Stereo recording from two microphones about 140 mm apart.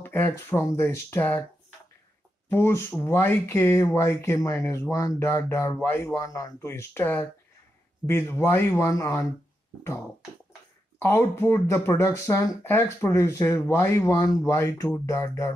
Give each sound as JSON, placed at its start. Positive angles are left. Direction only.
{"t": 0.0, "sound": "speech", "side_deg": 15}
{"t": 2.5, "sound": "speech", "side_deg": 15}
{"t": 11.0, "sound": "speech", "side_deg": 15}